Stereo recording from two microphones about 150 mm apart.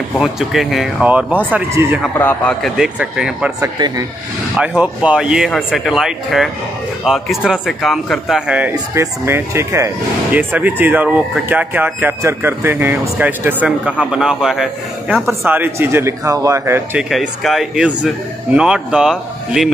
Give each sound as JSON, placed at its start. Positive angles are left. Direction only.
{"t": 0.2, "sound": "speech", "side_deg": -5}
{"t": 2.1, "sound": "a man's voice", "side_deg": 10}
{"t": 2.8, "sound": "speech", "side_deg": -5}
{"t": 3.6, "sound": "speech", "side_deg": -25}
{"t": 4.6, "sound": "speech", "side_deg": -10}
{"t": 15.4, "sound": "speech", "side_deg": -15}
{"t": 17.1, "sound": "speech", "side_deg": 0}